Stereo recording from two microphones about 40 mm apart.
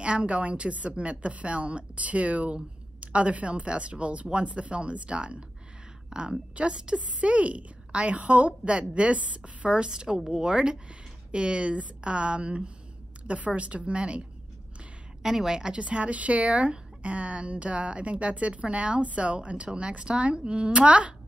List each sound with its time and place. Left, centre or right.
0.0 s a woman's voice: right
8.6 s a woman's voice: right
15.2 s a woman's voice: centre
15.8 s a woman's voice: right